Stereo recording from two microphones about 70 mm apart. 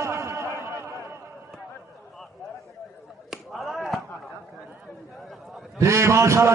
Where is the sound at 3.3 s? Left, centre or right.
Centre.